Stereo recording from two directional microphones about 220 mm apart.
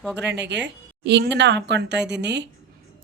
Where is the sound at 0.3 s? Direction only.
55° right (ahead or behind).